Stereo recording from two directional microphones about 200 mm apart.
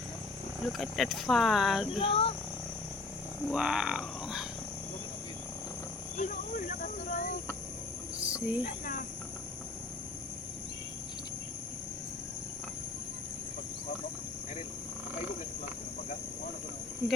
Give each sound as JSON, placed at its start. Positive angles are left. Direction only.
{"t": 0.6, "sound": "speech", "side_deg": 0}
{"t": 2.0, "sound": "speech", "side_deg": 30}
{"t": 3.4, "sound": "speech", "side_deg": -5}
{"t": 6.1, "sound": "cricket", "side_deg": 40}
{"t": 8.2, "sound": "cricket", "side_deg": -5}